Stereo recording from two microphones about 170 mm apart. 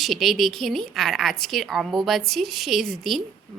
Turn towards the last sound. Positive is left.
turn(degrees=0)  # may be behind; listen again after turning